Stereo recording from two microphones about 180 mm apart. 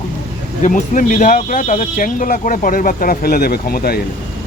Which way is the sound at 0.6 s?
45° left (ahead or behind).